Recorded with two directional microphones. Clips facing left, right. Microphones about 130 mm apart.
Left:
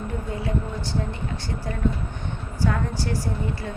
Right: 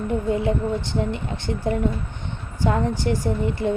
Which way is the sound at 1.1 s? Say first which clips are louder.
Right 4 dB; 20° right (ahead or behind).